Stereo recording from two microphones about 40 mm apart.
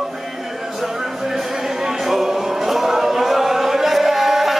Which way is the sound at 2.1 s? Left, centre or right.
Centre.